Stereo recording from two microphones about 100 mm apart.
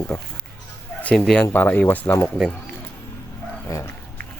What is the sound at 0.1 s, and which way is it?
Speech, 5° left (ahead or behind).